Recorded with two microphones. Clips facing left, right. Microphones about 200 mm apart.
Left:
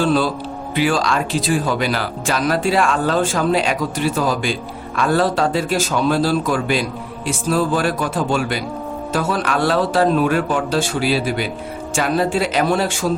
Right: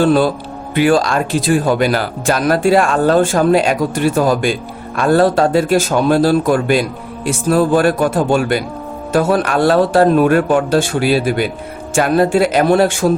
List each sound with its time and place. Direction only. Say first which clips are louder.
0.0 s speech: right 5 dB; 55° right (ahead or behind)